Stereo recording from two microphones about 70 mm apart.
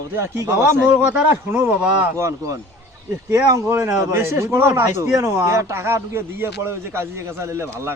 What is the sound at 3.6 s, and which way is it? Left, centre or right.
A man's voice, right.